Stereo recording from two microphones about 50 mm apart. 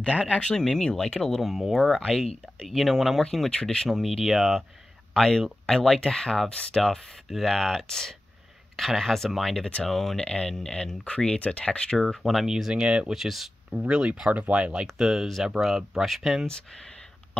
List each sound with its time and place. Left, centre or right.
0.3 s speech: centre
3.6 s speech: centre
3.9 s speech: centre
5.1 s speech: centre
10.2 s speech: centre
12.0 s speech: centre
12.4 s speech: centre
13.7 s speech: right; by 16.4 s centre